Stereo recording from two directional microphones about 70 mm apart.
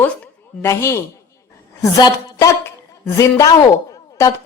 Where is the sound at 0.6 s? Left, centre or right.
Left.